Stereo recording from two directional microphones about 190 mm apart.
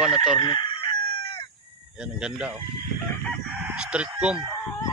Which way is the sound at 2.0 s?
5° right (ahead or behind).